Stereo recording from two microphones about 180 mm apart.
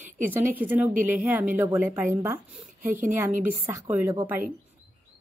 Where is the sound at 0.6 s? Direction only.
10° right (ahead or behind).